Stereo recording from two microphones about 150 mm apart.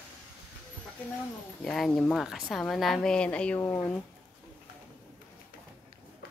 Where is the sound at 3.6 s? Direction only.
20° left (ahead or behind).